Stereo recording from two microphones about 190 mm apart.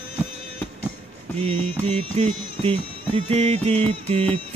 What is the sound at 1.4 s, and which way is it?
Music, 30° right (ahead or behind).